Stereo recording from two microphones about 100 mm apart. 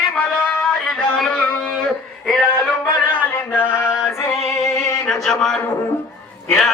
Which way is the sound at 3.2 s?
20° left (ahead or behind).